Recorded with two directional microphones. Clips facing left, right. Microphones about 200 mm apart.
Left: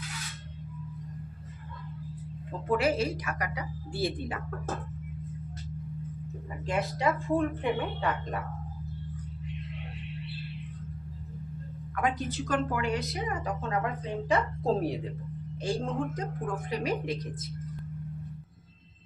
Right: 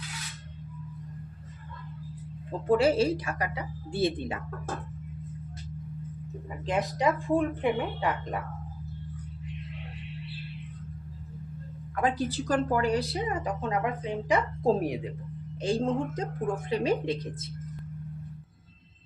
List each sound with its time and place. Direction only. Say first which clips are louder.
2.6 s speech: right 4 dB; 30° right (ahead or behind)
6.7 s speech: right 2 dB; 20° right (ahead or behind)
11.9 s a woman's voice: right 3 dB; 30° right (ahead or behind); by 14.9 s 10° right (ahead or behind)
15.6 s speech: right 4 dB; 25° right (ahead or behind)